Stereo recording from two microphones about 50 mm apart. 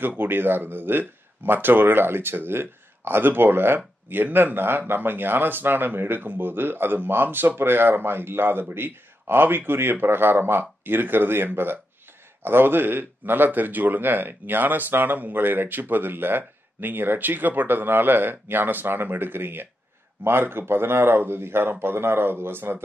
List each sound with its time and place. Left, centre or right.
0.2 s speech: right